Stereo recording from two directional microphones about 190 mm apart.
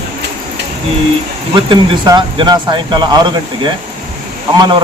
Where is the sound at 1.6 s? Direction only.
25° right (ahead or behind).